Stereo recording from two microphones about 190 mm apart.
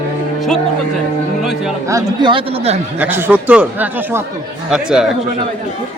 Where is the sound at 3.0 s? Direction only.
10° right (ahead or behind).